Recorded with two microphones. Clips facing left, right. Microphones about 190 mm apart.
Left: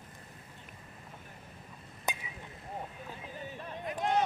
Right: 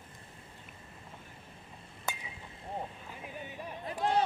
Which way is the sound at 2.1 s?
20° left (ahead or behind).